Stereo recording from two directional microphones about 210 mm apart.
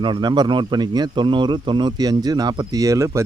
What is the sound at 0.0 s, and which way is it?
Speech, 20° right (ahead or behind).